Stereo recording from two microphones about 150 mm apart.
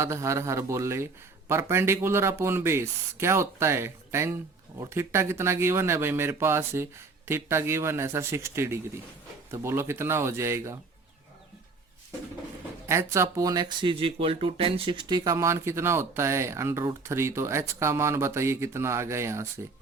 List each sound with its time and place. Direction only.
0.0 s speech: 20° right (ahead or behind)
12.9 s speech: 20° right (ahead or behind)